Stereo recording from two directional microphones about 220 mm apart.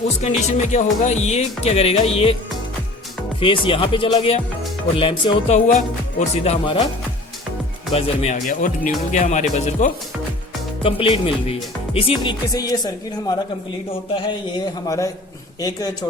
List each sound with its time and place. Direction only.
0.2 s speech: 30° left (ahead or behind)
3.4 s speech: 25° left (ahead or behind)
7.9 s speech: 25° left (ahead or behind)